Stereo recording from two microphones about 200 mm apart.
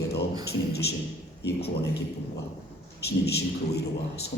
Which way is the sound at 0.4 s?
55° left (ahead or behind).